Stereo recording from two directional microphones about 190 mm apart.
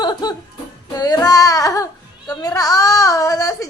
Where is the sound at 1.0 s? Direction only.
20° left (ahead or behind).